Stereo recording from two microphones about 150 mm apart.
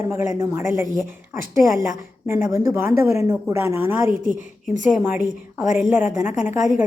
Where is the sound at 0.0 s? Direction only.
15° right (ahead or behind).